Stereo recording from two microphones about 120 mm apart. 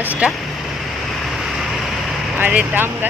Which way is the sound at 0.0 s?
15° right (ahead or behind).